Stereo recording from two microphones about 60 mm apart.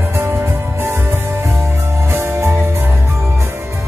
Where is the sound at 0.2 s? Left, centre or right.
Right.